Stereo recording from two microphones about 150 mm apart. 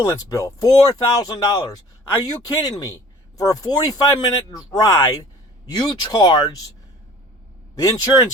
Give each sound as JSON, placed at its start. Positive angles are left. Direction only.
{"t": 0.1, "sound": "speech", "side_deg": 20}
{"t": 7.8, "sound": "speech", "side_deg": 20}